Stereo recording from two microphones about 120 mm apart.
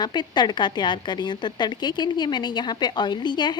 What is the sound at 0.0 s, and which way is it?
A woman's voice, 40° left (ahead or behind).